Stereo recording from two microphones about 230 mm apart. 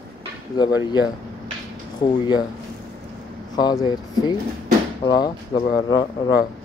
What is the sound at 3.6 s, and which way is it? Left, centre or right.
Speech, centre.